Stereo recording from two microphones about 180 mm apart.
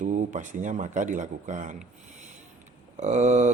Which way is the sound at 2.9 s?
40° right (ahead or behind).